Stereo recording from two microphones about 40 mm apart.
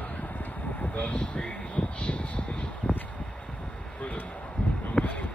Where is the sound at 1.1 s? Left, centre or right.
Left.